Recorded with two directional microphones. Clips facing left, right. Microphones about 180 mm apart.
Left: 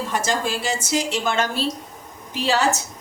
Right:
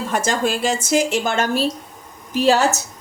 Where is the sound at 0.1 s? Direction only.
50° right (ahead or behind).